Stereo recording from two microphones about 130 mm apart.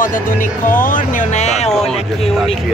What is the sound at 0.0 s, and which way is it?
Music, 90° left.